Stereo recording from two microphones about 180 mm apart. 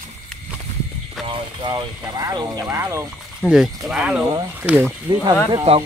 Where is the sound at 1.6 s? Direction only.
20° right (ahead or behind).